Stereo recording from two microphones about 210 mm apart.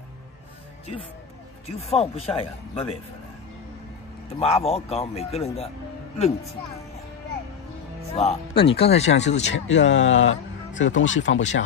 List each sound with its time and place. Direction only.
1.8 s speech: 30° left (ahead or behind)
4.4 s speech: 30° left (ahead or behind)
8.1 s speech: 30° left (ahead or behind)
9.5 s speech: 60° left (ahead or behind)